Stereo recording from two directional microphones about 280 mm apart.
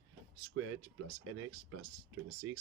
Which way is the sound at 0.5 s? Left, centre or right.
Right.